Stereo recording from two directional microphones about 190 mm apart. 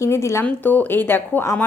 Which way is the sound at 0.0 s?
15° left (ahead or behind).